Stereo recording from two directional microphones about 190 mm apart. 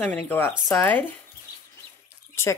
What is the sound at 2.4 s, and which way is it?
Speech, 15° left (ahead or behind).